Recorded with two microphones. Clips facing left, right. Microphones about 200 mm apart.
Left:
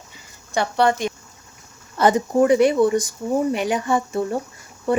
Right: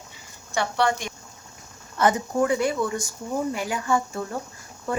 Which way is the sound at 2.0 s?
25° left (ahead or behind).